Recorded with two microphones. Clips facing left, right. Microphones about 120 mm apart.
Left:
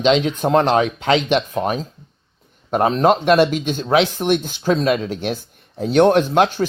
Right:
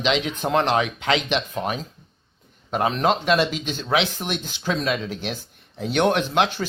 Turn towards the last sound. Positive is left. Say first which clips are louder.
# left 6 dB
turn(degrees=45)  # may be behind; listen again after turning